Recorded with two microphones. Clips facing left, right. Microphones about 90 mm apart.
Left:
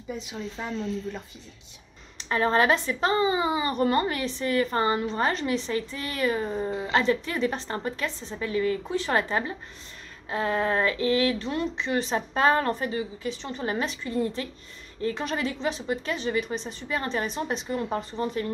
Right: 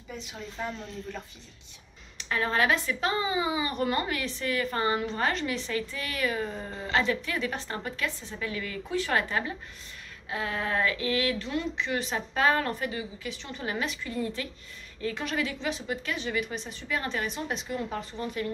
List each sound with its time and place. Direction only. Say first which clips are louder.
0.1 s speech: left 6 dB; 15° left (ahead or behind)
2.1 s a woman's voice: left 5 dB; 30° left (ahead or behind)
5.7 s a woman's voice: left 3 dB; 30° left (ahead or behind)